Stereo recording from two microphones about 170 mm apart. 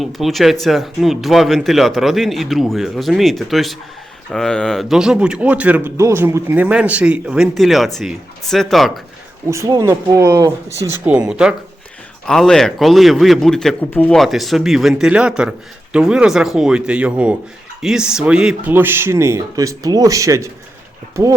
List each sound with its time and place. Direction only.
0.0 s a man's voice: centre (ahead or behind)
9.5 s speech: 20° right (ahead or behind)
11.3 s a man's voice: 5° right (ahead or behind)